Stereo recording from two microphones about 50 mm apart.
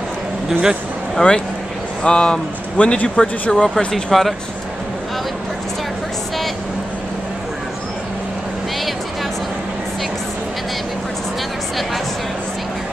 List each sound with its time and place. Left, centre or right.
0.5 s speech: centre
1.2 s speech: left
2.0 s speech: centre